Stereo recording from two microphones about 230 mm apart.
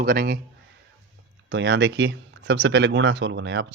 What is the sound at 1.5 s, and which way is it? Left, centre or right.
Speech, right.